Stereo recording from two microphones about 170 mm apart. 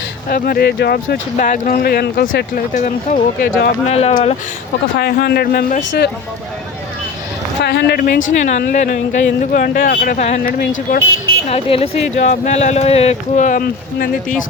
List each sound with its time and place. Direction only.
0.3 s speech: 55° left (ahead or behind)
2.7 s speech: 50° left (ahead or behind)
3.8 s speech: 40° left (ahead or behind)
4.9 s speech: 65° left (ahead or behind)
7.6 s speech: 75° left (ahead or behind); by 10.3 s 45° left (ahead or behind)
10.4 s speech: 60° left (ahead or behind)
11.4 s speech: 35° left (ahead or behind); by 14.4 s 55° left (ahead or behind)